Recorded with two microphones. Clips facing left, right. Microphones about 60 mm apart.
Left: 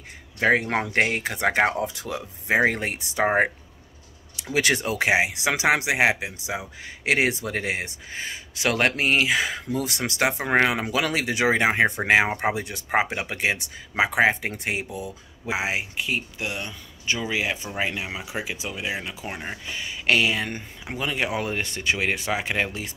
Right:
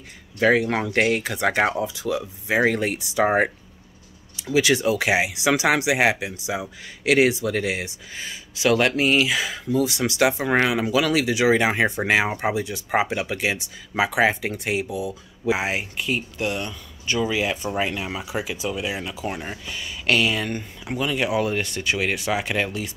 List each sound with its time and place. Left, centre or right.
0.4 s speech: left
1.7 s speech: left
4.4 s speech: left
12.9 s speech: left
14.9 s speech: right
15.5 s speech: centre